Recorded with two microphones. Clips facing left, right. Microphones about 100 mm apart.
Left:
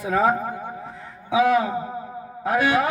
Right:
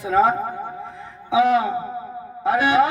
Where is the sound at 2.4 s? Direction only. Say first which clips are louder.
Right 3 dB; 20° right (ahead or behind).